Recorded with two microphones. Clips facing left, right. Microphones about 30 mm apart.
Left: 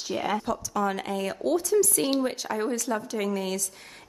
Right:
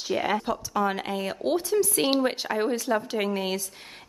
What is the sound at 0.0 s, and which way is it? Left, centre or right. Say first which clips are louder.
A woman's voice: right 2 dB; centre.